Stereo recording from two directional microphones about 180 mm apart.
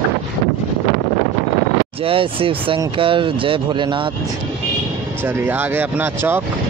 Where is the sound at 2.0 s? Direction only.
30° right (ahead or behind).